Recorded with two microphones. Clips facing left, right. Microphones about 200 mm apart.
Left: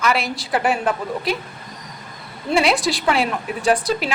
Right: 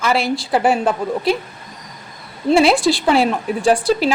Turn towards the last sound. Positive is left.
turn(degrees=-30)  # may be behind; listen again after turning